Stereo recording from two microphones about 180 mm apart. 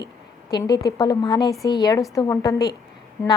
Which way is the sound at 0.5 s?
25° left (ahead or behind).